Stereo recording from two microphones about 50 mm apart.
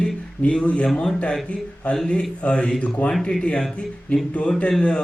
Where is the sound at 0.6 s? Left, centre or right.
Left.